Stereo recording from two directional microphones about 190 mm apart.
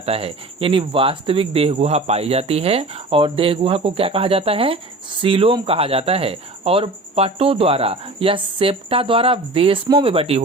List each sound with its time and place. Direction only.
0.0 s speech: 30° right (ahead or behind)